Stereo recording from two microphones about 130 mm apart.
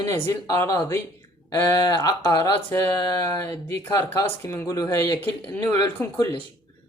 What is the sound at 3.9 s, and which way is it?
Speech, 25° left (ahead or behind).